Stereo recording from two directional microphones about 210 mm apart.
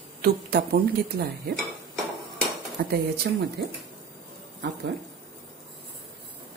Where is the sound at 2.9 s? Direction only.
50° right (ahead or behind).